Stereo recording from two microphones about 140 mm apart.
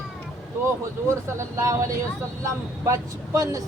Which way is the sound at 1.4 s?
20° right (ahead or behind).